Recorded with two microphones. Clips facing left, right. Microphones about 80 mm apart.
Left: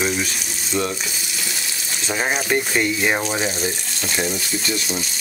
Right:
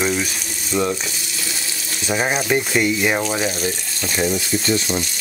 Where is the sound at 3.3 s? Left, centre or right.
Centre.